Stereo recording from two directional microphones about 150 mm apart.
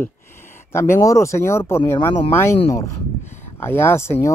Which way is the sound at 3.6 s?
15° left (ahead or behind).